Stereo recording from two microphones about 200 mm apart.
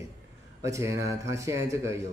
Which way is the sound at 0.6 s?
15° right (ahead or behind).